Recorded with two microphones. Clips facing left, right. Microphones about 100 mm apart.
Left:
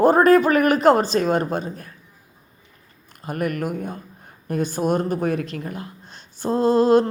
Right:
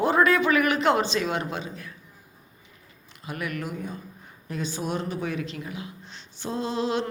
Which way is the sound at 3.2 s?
45° left (ahead or behind).